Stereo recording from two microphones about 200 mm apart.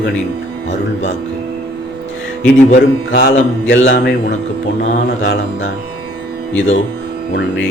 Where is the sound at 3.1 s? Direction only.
65° left (ahead or behind).